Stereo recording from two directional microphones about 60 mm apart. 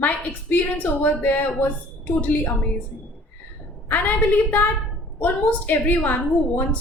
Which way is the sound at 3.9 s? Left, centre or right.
Left.